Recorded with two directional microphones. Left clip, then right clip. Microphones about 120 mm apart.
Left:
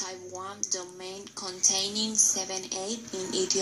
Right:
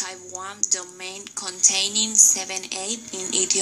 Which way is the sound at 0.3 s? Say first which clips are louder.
Right 6 dB; 30° right (ahead or behind).